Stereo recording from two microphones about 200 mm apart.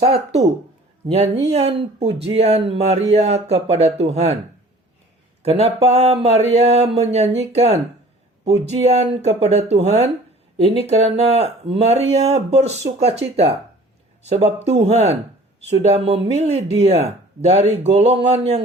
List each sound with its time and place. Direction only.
1.0 s speech: 30° right (ahead or behind)
5.4 s speech: 30° right (ahead or behind)